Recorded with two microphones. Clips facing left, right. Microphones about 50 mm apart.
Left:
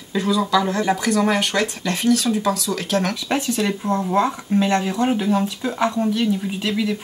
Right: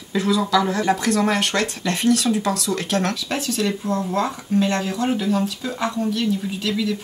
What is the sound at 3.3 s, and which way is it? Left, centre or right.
Speech, left.